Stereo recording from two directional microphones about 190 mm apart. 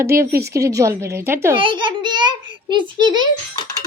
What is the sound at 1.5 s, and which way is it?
A child's voice, 25° right (ahead or behind).